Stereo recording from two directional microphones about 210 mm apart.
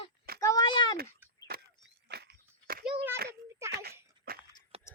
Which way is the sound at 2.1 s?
55° right (ahead or behind).